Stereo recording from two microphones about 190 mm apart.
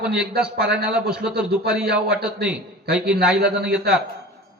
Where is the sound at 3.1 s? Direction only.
5° right (ahead or behind).